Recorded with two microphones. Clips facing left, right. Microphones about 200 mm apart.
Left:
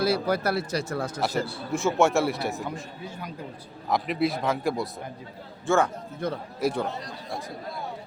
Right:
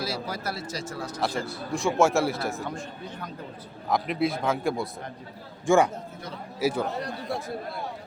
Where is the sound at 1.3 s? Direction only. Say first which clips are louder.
Left 3 dB; 35° left (ahead or behind).